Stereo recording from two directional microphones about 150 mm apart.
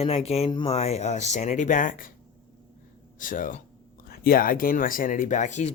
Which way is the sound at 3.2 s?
65° left (ahead or behind).